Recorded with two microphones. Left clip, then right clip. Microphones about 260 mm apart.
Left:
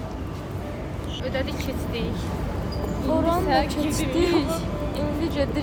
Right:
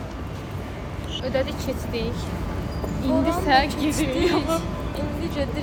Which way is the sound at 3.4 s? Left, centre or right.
Right.